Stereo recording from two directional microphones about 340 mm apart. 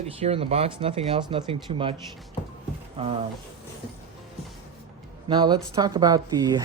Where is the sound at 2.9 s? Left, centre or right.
Centre.